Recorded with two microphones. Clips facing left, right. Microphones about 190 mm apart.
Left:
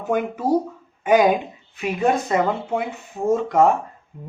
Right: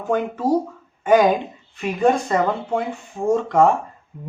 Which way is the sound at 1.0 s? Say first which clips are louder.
Right 1 dB; 10° left (ahead or behind).